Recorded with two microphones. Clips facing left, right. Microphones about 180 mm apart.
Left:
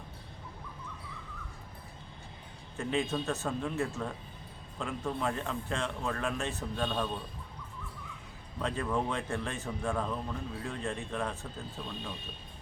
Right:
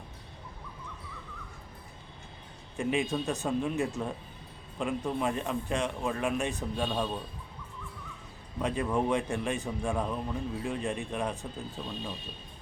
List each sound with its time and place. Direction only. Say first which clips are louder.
2.7 s speech: right 2 dB; 15° right (ahead or behind)
8.5 s speech: right 3 dB; 15° right (ahead or behind)